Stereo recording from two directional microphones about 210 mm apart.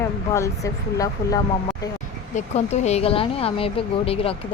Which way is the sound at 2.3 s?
30° left (ahead or behind).